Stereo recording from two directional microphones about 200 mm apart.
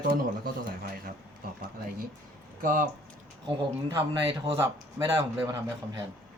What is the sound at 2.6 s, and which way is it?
Speech, 45° right (ahead or behind).